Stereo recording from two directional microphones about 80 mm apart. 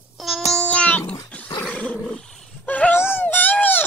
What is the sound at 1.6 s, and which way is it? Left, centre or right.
Dog, centre.